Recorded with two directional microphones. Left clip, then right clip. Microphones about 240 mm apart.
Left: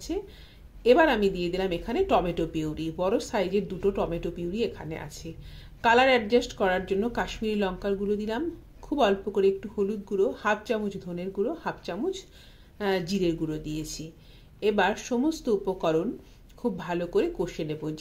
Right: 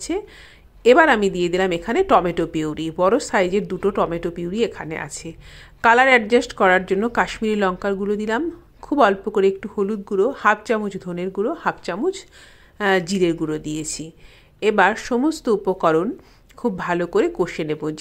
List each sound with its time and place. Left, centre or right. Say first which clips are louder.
0.8 s speech: right 7 dB; right